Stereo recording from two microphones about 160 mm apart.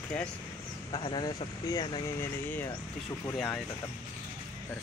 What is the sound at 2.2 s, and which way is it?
Speech, 15° left (ahead or behind).